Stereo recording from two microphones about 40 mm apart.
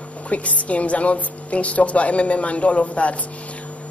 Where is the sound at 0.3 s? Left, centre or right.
Left.